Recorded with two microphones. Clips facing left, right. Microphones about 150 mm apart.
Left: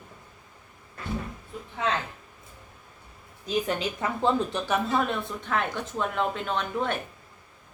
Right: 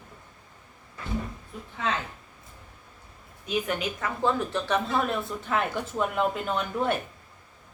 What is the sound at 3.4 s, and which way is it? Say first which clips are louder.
A woman's voice: left 1 dB; 30° left (ahead or behind).